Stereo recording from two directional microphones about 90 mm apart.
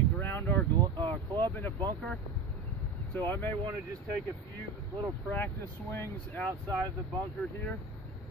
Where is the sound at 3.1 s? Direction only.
20° left (ahead or behind).